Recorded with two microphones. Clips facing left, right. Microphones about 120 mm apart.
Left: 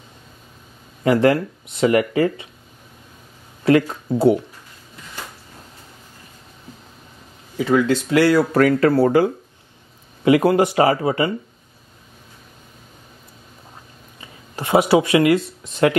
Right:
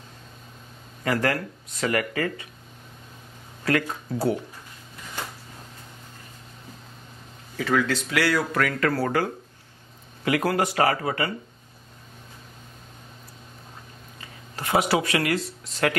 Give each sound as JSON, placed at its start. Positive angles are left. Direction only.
{"t": 1.0, "sound": "speech", "side_deg": 25}
{"t": 3.6, "sound": "speech", "side_deg": 25}
{"t": 7.5, "sound": "speech", "side_deg": 15}
{"t": 14.5, "sound": "speech", "side_deg": 25}